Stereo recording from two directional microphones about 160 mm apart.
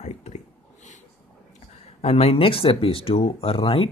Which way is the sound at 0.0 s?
45° left (ahead or behind).